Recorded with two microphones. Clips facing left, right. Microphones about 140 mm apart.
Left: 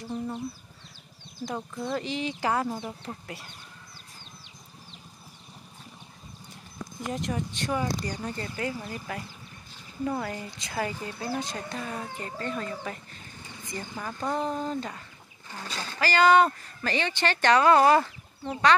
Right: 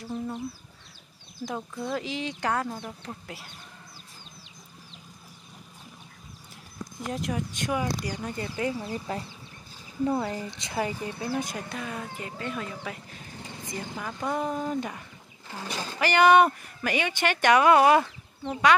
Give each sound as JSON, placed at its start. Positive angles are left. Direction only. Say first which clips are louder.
{"t": 0.0, "sound": "speech", "louder": "even", "side_deg": 0}
{"t": 1.4, "sound": "speech", "louder": "even", "side_deg": 0}
{"t": 7.1, "sound": "speech", "louder": "even", "side_deg": -5}
{"t": 8.8, "sound": "speech", "louder": "right 3 dB", "side_deg": -25}
{"t": 18.0, "sound": "chicken", "louder": "right 1 dB", "side_deg": 0}